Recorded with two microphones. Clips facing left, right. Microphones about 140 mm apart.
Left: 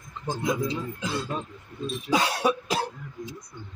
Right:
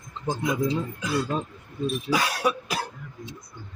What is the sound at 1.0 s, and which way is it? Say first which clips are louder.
Speech: right 4 dB; 25° left (ahead or behind).